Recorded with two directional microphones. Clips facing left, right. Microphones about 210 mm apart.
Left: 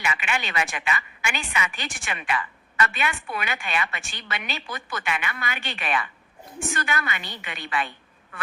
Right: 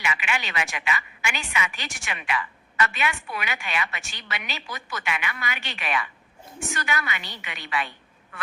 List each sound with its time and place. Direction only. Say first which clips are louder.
0.0 s a woman's voice: left 1 dB; 40° left (ahead or behind)
5.0 s a woman's voice: even; 40° left (ahead or behind)